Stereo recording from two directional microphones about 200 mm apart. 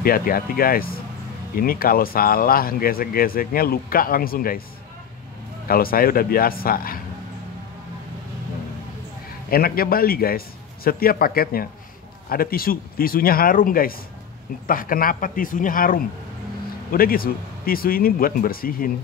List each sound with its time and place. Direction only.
0.0 s speech: 45° left (ahead or behind)
5.7 s speech: 45° left (ahead or behind)
9.5 s speech: 50° left (ahead or behind)